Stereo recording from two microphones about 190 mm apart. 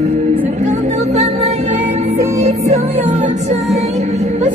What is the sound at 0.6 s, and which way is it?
Music, 35° right (ahead or behind).